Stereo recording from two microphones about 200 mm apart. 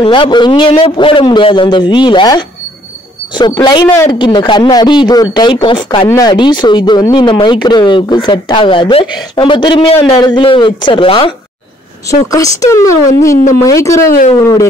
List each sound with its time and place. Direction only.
0.0 s a man's voice: 25° left (ahead or behind)